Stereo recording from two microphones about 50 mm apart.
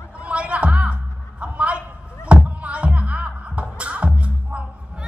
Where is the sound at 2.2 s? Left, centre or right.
Right.